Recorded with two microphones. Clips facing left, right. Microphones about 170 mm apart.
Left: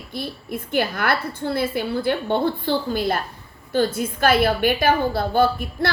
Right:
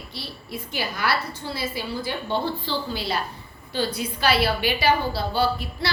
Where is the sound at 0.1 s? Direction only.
50° left (ahead or behind).